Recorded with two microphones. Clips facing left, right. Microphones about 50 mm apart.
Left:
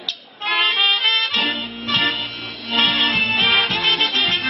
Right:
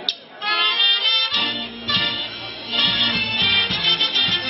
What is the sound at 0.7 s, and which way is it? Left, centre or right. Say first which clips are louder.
Music: left 2 dB; left.